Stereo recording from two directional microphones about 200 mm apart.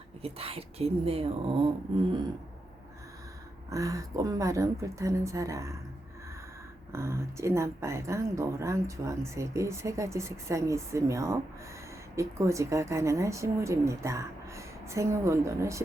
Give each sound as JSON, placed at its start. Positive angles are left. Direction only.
{"t": 0.2, "sound": "speech", "side_deg": -30}
{"t": 3.7, "sound": "speech", "side_deg": -15}
{"t": 6.9, "sound": "speech", "side_deg": -15}